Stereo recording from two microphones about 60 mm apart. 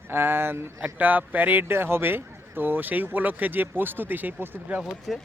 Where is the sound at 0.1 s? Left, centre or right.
Right.